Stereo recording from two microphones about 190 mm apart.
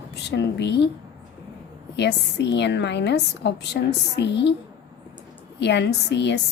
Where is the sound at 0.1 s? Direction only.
65° left (ahead or behind).